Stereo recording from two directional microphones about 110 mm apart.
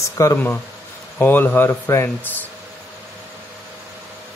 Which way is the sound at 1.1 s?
15° left (ahead or behind).